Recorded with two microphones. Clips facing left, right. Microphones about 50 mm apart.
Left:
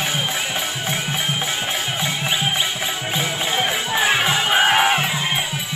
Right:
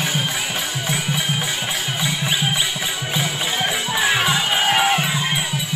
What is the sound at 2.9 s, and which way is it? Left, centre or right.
Music, left.